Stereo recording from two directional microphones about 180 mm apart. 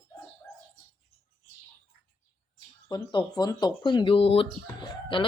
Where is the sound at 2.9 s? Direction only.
25° left (ahead or behind).